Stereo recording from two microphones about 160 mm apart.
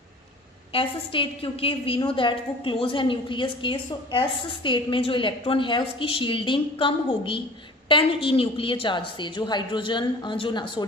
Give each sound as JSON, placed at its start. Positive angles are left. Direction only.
{"t": 0.7, "sound": "a woman's voice", "side_deg": 35}